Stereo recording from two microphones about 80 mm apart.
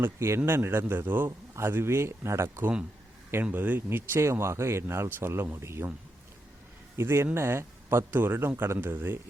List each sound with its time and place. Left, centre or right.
0.0 s a man's voice: right
3.5 s speech: right
6.9 s a man's voice: right